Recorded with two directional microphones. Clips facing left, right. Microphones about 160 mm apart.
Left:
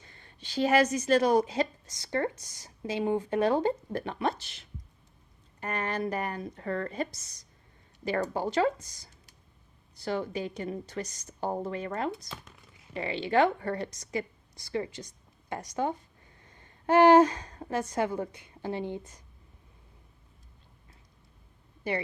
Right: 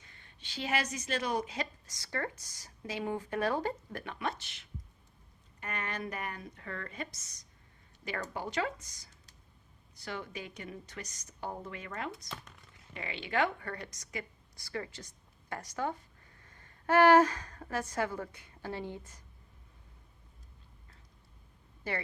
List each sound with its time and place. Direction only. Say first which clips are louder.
0.0 s a woman's voice: left 5 dB; 35° left (ahead or behind)
21.8 s speech: left 6 dB; 15° left (ahead or behind)